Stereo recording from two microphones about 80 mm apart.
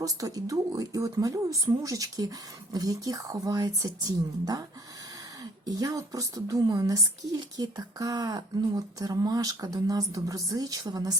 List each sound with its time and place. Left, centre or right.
0.0 s speech: right